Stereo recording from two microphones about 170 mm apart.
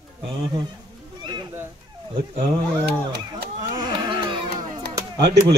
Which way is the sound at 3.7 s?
25° right (ahead or behind).